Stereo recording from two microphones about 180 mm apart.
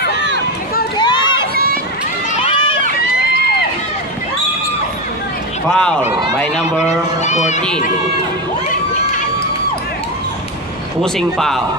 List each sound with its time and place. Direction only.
0.9 s run: 25° left (ahead or behind)
1.5 s a sound: 55° right (ahead or behind)
2.4 s run: 30° left (ahead or behind)
5.7 s speech: 5° left (ahead or behind)
7.2 s speech: 40° left (ahead or behind)
11.0 s speech: centre (ahead or behind)